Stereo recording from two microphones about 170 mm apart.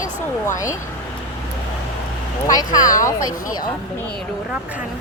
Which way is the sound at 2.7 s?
20° left (ahead or behind).